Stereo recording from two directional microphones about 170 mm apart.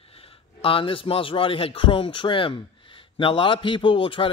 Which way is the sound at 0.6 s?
30° left (ahead or behind).